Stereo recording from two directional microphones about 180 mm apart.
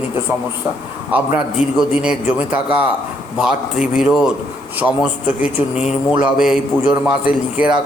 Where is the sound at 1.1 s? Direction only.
5° right (ahead or behind).